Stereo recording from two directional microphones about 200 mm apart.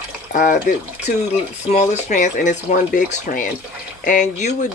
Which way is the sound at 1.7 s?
35° left (ahead or behind).